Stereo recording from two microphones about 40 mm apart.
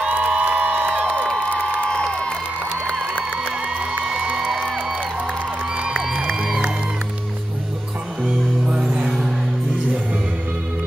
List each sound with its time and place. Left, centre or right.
0.0 s crowd: right
1.1 s crowd: centre
4.0 s music: centre
8.6 s music: right